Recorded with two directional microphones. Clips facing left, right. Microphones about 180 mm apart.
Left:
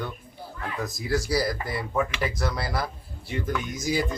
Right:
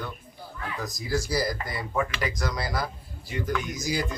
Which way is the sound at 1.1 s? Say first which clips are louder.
Left 2 dB; centre (ahead or behind).